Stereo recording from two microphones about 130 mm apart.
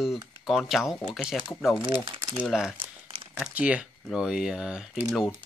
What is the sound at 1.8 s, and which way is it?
Speech, 40° right (ahead or behind).